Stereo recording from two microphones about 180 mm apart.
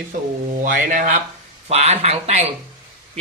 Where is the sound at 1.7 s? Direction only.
35° right (ahead or behind).